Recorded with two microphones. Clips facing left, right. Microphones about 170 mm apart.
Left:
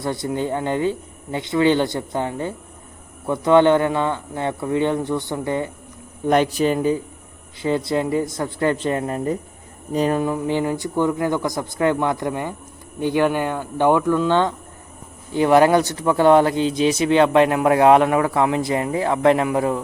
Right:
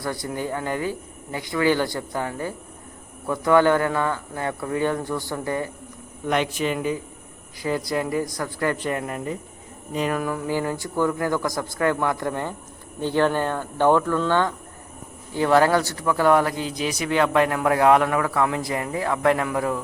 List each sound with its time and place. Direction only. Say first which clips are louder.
0.0 s a man's voice: left 5 dB; 25° left (ahead or behind)
6.2 s a man's voice: left 6 dB; 40° left (ahead or behind)